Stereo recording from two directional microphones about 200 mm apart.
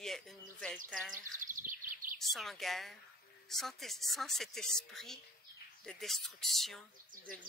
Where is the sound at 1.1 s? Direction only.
40° right (ahead or behind).